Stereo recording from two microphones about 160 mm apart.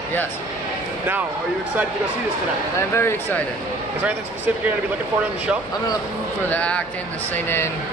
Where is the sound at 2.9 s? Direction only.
15° left (ahead or behind).